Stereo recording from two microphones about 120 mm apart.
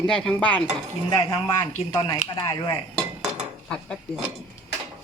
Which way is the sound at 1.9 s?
40° left (ahead or behind).